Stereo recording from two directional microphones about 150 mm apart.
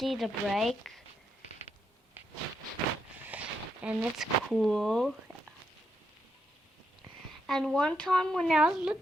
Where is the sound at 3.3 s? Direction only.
10° right (ahead or behind).